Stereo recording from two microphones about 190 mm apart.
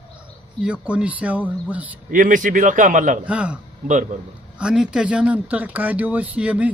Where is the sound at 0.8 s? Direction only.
5° right (ahead or behind).